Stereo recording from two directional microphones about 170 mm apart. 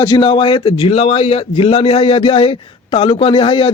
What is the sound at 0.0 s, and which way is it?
A man's voice, 25° left (ahead or behind).